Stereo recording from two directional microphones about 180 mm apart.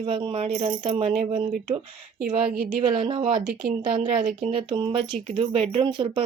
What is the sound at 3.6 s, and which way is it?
Speech, centre (ahead or behind).